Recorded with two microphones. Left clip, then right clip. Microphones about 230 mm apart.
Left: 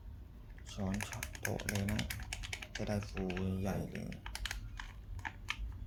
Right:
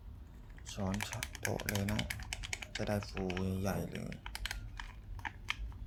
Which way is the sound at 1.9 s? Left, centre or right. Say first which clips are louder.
Right 2 dB; centre.